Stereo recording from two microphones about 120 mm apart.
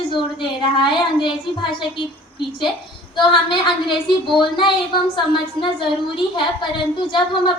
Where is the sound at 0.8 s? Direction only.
40° left (ahead or behind).